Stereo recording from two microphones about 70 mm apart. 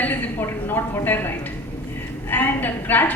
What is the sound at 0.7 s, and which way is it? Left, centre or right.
Speech, left.